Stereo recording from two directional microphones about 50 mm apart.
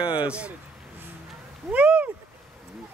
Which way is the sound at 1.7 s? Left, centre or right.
Right.